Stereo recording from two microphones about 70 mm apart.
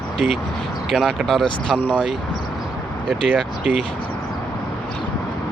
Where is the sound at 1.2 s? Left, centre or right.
Centre.